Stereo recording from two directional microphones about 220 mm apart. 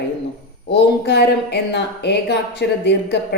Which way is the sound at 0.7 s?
50° left (ahead or behind).